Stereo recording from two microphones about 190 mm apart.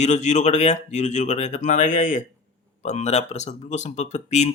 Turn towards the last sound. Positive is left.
turn(degrees=35)  # may be behind; listen again after turning